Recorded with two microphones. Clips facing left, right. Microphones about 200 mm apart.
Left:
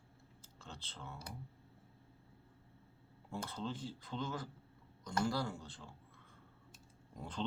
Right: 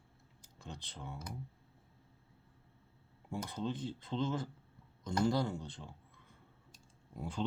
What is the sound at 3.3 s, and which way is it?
Speech, 15° right (ahead or behind).